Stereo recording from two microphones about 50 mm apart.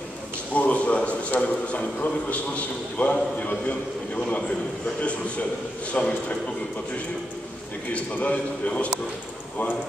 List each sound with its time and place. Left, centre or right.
0.6 s a man's voice: left
5.9 s a man's voice: left
7.9 s a man's voice: left